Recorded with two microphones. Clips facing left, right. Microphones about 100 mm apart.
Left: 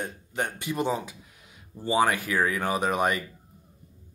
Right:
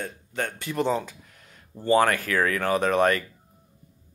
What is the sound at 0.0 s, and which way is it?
A man's voice, 15° left (ahead or behind).